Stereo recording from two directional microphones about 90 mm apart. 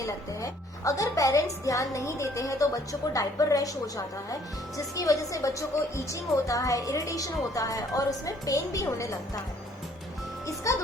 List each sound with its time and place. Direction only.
0.0 s a woman's voice: 35° left (ahead or behind)
10.4 s a woman's voice: 35° left (ahead or behind)